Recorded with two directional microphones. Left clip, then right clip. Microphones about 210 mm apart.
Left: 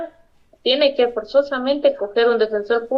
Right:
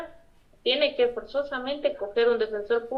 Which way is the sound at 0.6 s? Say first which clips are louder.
Left 7 dB; 50° left (ahead or behind).